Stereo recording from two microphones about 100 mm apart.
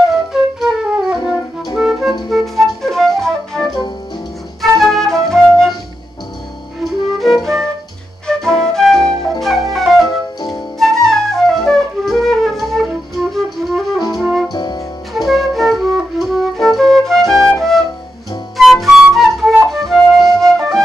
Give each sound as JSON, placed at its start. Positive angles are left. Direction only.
{"t": 0.3, "sound": "flute", "side_deg": -5}
{"t": 1.8, "sound": "music", "side_deg": 0}
{"t": 2.2, "sound": "flute", "side_deg": 0}
{"t": 4.6, "sound": "music", "side_deg": 0}
{"t": 6.8, "sound": "music", "side_deg": 0}
{"t": 8.3, "sound": "flute", "side_deg": 5}
{"t": 10.0, "sound": "music", "side_deg": 40}
{"t": 10.8, "sound": "flute", "side_deg": 5}
{"t": 14.1, "sound": "music", "side_deg": 0}
{"t": 14.5, "sound": "music", "side_deg": 45}
{"t": 15.1, "sound": "flute", "side_deg": 0}